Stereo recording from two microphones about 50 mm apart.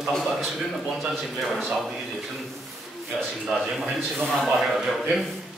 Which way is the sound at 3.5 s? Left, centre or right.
Centre.